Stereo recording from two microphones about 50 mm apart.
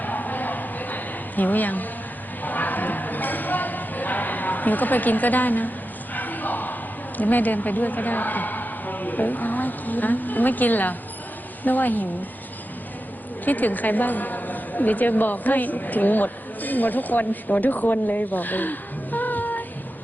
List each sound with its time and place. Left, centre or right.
0.0 s a sound: left
7.2 s a woman's voice: left
13.4 s a woman's voice: left